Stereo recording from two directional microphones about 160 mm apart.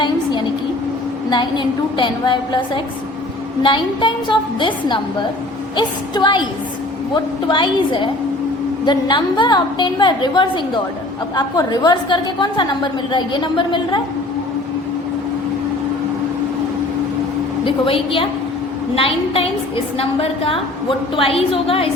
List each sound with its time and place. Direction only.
1.3 s a woman's voice: 30° left (ahead or behind)
17.7 s a woman's voice: 35° left (ahead or behind)